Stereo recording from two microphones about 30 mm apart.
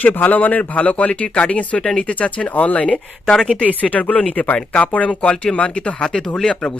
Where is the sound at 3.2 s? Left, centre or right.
Left.